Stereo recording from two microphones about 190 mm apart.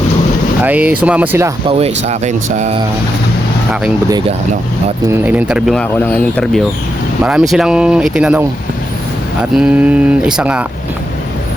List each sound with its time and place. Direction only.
0.6 s speech: 10° right (ahead or behind)
1.6 s speech: 30° right (ahead or behind)
5.2 s speech: 5° right (ahead or behind)